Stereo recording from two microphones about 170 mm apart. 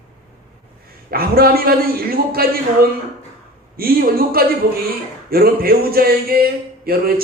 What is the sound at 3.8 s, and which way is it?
A man's voice, 60° right (ahead or behind).